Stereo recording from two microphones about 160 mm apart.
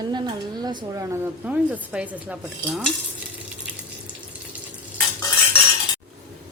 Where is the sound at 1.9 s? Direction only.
10° right (ahead or behind).